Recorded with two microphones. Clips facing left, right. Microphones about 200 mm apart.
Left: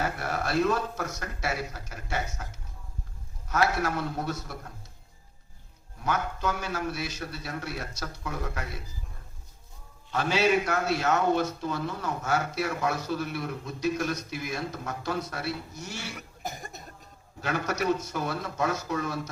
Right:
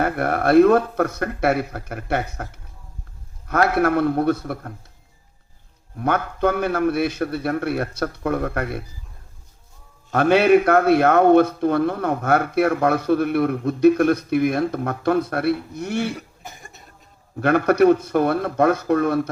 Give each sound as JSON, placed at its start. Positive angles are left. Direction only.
{"t": 0.0, "sound": "a man's voice", "side_deg": -60}
{"t": 6.0, "sound": "a man's voice", "side_deg": -60}
{"t": 10.1, "sound": "a man's voice", "side_deg": -60}
{"t": 16.4, "sound": "cough", "side_deg": 40}
{"t": 17.4, "sound": "a man's voice", "side_deg": -60}